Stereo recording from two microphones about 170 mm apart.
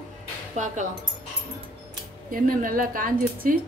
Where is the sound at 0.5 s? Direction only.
45° right (ahead or behind).